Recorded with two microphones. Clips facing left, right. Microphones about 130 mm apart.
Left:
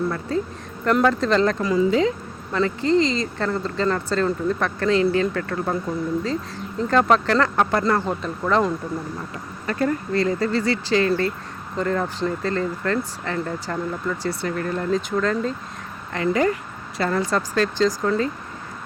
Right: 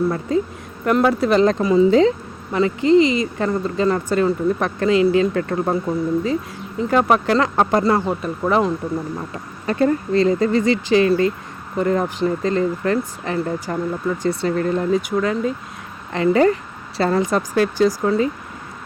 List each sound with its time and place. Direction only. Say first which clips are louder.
0.1 s speech: right 4 dB; 15° right (ahead or behind)
1.9 s speech: right 5 dB; 35° right (ahead or behind)
2.5 s speech: right 5 dB; 15° right (ahead or behind)
6.7 s speech: right 1 dB; 10° right (ahead or behind)
14.9 s speech: right 2 dB; 10° right (ahead or behind)
16.1 s speech: right 5 dB; 30° right (ahead or behind)
17.2 s speech: right 3 dB; 15° right (ahead or behind)